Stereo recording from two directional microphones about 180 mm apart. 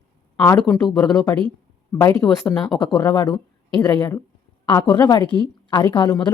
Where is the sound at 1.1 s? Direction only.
20° left (ahead or behind).